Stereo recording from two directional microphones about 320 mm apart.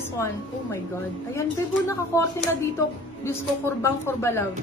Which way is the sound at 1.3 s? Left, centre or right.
Centre.